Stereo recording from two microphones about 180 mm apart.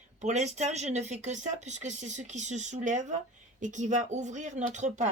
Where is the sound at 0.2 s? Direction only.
40° right (ahead or behind).